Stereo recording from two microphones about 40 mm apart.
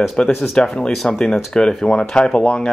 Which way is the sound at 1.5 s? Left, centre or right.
Centre.